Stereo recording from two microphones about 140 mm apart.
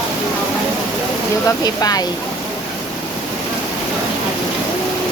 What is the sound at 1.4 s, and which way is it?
Speech, 25° left (ahead or behind).